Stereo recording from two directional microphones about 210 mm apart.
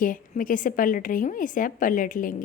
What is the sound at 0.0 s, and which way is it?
A woman's voice, 40° left (ahead or behind).